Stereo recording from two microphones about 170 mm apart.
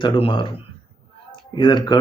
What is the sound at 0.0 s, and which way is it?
Speech, 30° left (ahead or behind).